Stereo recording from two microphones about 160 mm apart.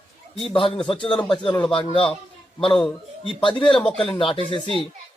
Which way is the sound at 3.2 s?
35° left (ahead or behind).